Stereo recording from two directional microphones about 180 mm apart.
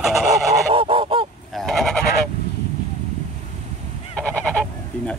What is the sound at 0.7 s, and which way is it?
Goose, 30° right (ahead or behind).